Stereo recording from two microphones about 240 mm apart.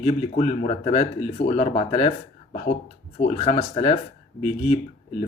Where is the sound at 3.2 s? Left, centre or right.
Left.